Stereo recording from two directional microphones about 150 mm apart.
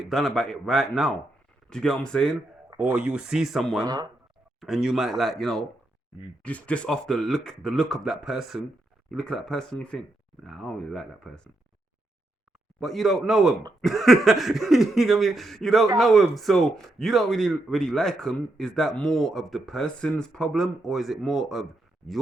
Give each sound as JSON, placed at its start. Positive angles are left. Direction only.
{"t": 0.1, "sound": "speech", "side_deg": 0}
{"t": 2.7, "sound": "speech", "side_deg": -5}
{"t": 3.8, "sound": "speech", "side_deg": -25}
{"t": 4.6, "sound": "speech", "side_deg": 0}
{"t": 12.8, "sound": "speech", "side_deg": 0}